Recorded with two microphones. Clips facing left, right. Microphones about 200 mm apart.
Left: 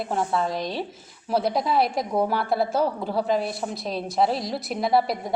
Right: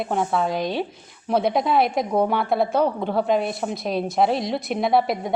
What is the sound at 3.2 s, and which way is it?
A woman's voice, centre (ahead or behind).